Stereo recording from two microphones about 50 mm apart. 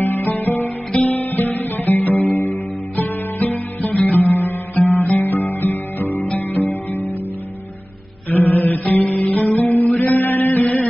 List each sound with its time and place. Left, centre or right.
0.0 s music: left
8.3 s music: left